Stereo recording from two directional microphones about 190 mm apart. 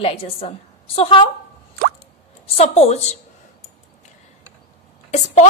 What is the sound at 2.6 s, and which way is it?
Speech, 35° left (ahead or behind).